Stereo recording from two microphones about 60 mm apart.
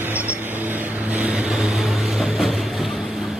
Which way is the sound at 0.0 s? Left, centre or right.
Right.